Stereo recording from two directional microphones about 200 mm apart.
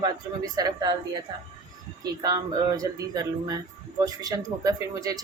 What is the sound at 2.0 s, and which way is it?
A woman's voice, 20° right (ahead or behind).